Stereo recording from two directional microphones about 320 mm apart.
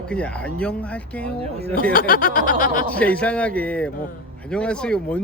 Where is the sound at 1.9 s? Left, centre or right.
Left.